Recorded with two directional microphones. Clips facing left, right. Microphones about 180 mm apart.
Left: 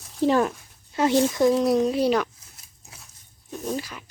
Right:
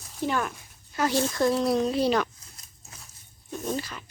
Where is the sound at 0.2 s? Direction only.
30° left (ahead or behind).